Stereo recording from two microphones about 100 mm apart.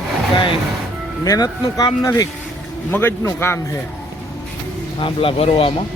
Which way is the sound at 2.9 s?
20° left (ahead or behind).